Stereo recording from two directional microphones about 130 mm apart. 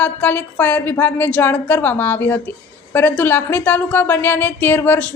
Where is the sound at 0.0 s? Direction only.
15° left (ahead or behind).